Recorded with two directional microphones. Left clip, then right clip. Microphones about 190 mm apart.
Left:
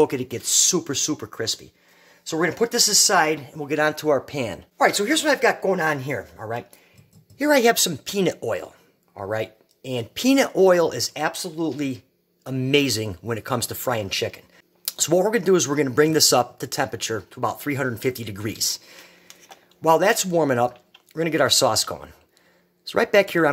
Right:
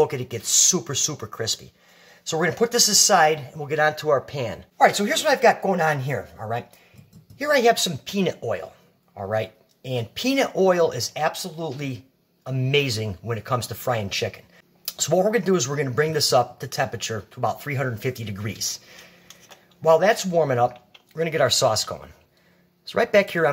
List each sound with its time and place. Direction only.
0.0 s speech: 45° left (ahead or behind)